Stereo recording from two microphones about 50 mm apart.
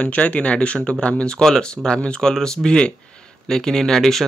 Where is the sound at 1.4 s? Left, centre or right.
Centre.